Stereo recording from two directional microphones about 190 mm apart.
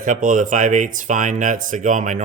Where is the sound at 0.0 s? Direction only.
45° right (ahead or behind).